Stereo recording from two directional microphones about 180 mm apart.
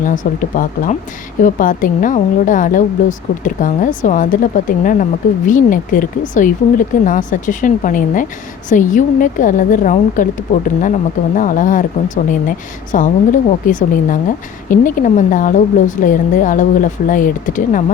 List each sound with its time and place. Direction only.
0.0 s a woman's voice: 45° left (ahead or behind)